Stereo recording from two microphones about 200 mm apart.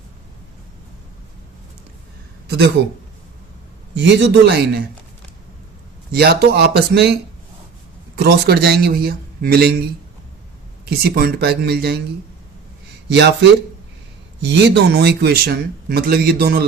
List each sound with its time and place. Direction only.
3.9 s a man's voice: 60° right (ahead or behind)
6.1 s speech: 50° right (ahead or behind)
10.8 s speech: 50° right (ahead or behind)
13.1 s a man's voice: 60° right (ahead or behind)